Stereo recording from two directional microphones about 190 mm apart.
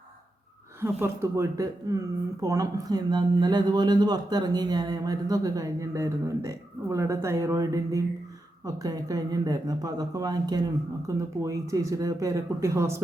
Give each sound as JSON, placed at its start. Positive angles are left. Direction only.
{"t": 0.8, "sound": "a man's voice", "side_deg": -15}